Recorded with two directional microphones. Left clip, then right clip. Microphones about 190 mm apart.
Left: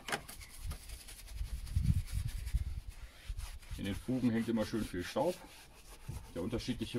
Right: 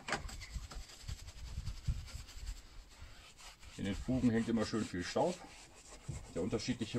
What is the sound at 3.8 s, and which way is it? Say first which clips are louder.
Speech: even; 20° right (ahead or behind).